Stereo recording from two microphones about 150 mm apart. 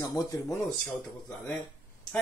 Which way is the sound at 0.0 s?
25° left (ahead or behind).